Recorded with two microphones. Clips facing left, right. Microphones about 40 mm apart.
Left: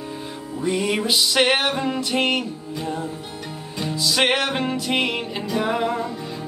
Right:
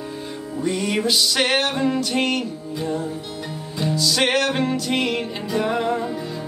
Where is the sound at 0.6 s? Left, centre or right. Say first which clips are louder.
Even; centre.